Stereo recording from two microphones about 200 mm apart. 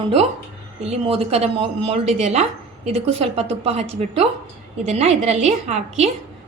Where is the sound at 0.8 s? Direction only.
30° right (ahead or behind).